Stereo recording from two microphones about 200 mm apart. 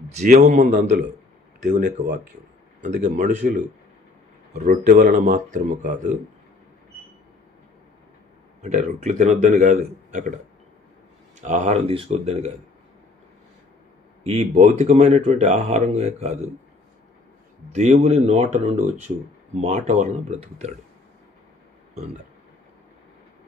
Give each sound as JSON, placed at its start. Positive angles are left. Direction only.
{"t": 0.2, "sound": "speech", "side_deg": -35}
{"t": 8.6, "sound": "speech", "side_deg": -35}
{"t": 11.4, "sound": "speech", "side_deg": -35}
{"t": 14.2, "sound": "speech", "side_deg": -30}
{"t": 17.7, "sound": "speech", "side_deg": -35}